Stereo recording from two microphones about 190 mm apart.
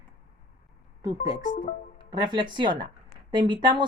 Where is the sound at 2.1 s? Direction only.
25° right (ahead or behind).